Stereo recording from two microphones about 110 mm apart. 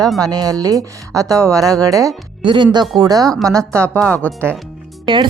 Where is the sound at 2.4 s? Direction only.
45° right (ahead or behind).